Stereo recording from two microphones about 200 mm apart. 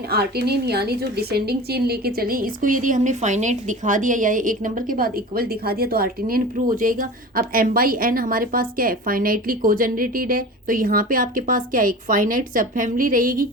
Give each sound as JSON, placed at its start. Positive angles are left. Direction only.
{"t": 0.1, "sound": "a woman's voice", "side_deg": -50}